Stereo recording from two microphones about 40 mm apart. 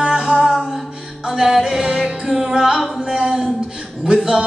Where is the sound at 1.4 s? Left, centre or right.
Centre.